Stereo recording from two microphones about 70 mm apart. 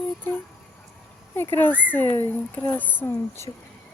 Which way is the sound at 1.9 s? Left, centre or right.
Left.